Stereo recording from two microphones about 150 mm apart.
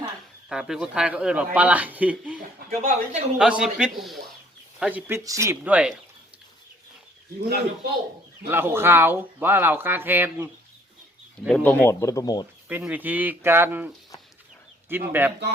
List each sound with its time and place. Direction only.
0.4 s speech: 5° right (ahead or behind)
2.6 s speech: 50° right (ahead or behind)
3.3 s a man's voice: 5° right (ahead or behind)
8.4 s speech: 15° right (ahead or behind)
11.4 s speech: 10° left (ahead or behind); by 12.5 s 25° left (ahead or behind)
12.6 s a man's voice: 10° right (ahead or behind)